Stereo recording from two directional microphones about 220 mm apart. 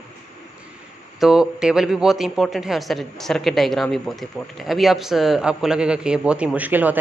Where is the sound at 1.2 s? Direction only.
5° right (ahead or behind).